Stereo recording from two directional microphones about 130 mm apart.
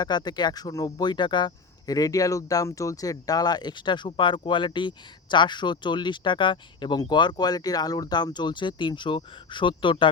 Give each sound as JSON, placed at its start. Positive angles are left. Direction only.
{"t": 0.0, "sound": "speech", "side_deg": 35}